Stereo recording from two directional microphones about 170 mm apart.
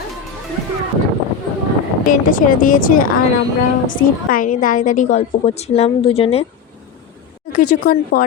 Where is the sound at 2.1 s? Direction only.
50° left (ahead or behind); by 6.4 s 35° left (ahead or behind).